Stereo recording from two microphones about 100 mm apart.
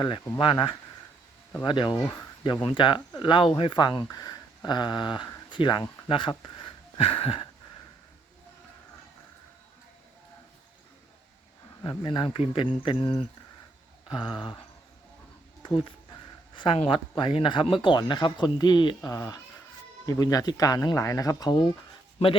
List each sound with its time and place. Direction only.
0.0 s speech: 60° left (ahead or behind)
11.9 s speech: 55° left (ahead or behind)
15.6 s speech: 55° left (ahead or behind)
16.6 s speech: 65° left (ahead or behind)
17.2 s speech: 55° left (ahead or behind)
20.1 s speech: 35° left (ahead or behind)